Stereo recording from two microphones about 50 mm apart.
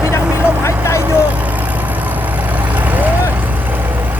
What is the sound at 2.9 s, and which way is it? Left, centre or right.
Vehicle, right.